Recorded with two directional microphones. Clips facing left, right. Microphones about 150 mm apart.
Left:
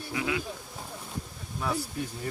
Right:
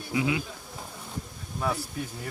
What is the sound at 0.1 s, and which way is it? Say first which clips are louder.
Speech: right 4 dB; 20° right (ahead or behind).